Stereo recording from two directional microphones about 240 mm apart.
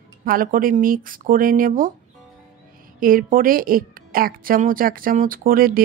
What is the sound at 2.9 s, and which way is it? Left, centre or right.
A woman's voice, right.